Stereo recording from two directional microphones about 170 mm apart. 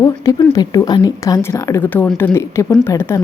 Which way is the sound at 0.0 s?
20° left (ahead or behind).